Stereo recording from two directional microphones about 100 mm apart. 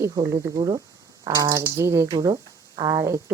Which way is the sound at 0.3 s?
55° right (ahead or behind).